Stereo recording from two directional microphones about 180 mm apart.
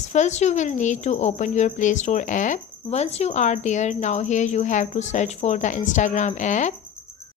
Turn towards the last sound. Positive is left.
turn(degrees=40)  # may be behind; listen again after turning